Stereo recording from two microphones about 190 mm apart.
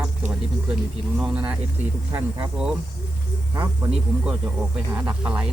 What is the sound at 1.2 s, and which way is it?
Speech, 5° right (ahead or behind).